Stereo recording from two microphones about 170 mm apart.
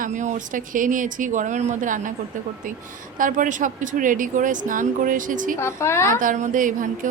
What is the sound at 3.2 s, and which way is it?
Speech, 50° right (ahead or behind).